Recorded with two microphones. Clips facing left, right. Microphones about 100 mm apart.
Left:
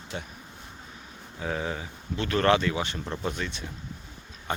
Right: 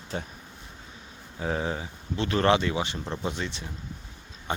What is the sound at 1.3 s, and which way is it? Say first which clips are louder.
Speech: right 2 dB; 30° right (ahead or behind).